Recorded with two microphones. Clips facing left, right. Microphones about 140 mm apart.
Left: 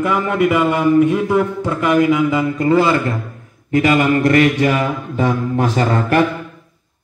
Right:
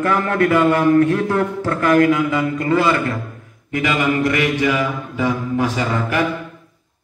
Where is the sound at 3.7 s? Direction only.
45° left (ahead or behind).